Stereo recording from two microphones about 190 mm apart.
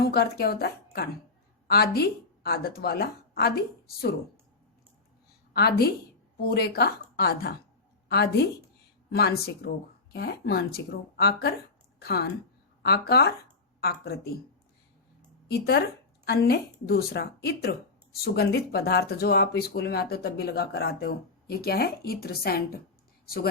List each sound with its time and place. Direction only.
0.0 s a woman's voice: 55° left (ahead or behind)
5.5 s a woman's voice: 55° left (ahead or behind)
15.4 s speech: 60° left (ahead or behind)